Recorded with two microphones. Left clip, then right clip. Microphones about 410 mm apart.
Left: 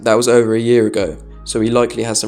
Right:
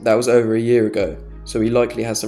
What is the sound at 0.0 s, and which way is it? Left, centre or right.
Speech, right.